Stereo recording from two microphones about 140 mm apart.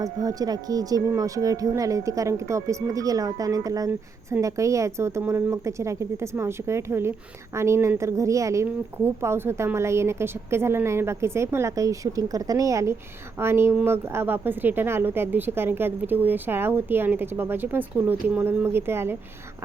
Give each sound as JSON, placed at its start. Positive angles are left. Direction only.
{"t": 0.0, "sound": "speech", "side_deg": -25}